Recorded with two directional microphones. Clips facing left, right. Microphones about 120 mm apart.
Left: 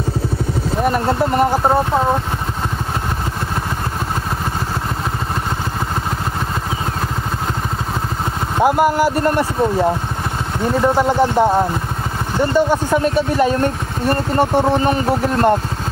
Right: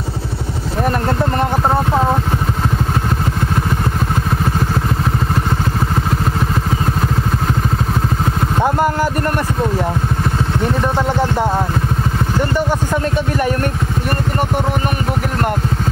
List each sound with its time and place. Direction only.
1.5 s speech: centre (ahead or behind)
8.5 s speech: 15° left (ahead or behind)
11.0 s a sound: 20° left (ahead or behind)
12.4 s speech: 20° left (ahead or behind)